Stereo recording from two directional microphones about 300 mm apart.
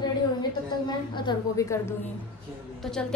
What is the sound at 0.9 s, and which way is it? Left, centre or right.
A woman's voice, centre.